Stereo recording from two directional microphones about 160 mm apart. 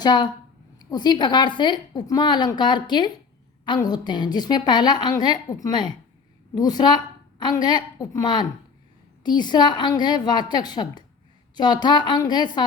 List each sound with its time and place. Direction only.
0.0 s a woman's voice: 25° left (ahead or behind)